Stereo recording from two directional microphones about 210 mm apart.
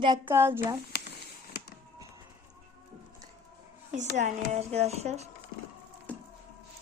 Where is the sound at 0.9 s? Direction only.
50° left (ahead or behind).